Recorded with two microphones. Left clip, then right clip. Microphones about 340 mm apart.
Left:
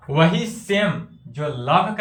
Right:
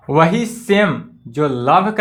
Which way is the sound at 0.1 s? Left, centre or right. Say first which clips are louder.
Right 5 dB; centre.